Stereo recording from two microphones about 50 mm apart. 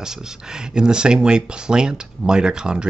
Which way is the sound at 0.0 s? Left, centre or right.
Centre.